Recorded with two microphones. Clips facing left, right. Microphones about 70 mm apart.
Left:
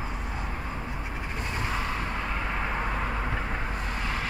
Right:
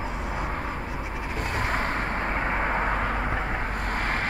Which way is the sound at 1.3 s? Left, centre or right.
Right.